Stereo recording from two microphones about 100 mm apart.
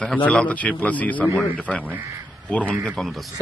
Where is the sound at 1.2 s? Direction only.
Centre (ahead or behind).